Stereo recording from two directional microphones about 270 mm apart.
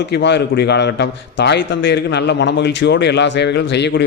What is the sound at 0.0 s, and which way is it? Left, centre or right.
A man's voice, left.